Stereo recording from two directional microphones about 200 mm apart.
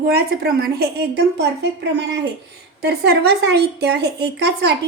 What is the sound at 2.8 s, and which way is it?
A woman's voice, 55° right (ahead or behind).